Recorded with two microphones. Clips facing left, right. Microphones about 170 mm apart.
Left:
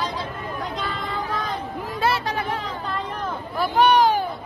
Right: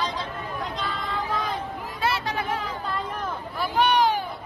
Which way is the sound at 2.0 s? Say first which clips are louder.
Left 4 dB; 40° left (ahead or behind).